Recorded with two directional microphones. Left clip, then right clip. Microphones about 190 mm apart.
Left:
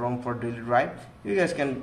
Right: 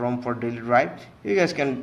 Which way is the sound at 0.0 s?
25° right (ahead or behind).